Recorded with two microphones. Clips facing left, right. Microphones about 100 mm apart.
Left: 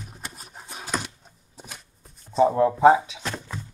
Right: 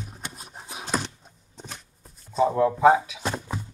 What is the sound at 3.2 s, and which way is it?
Music, 20° right (ahead or behind).